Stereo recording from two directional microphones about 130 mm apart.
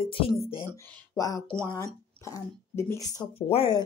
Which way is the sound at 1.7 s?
25° left (ahead or behind).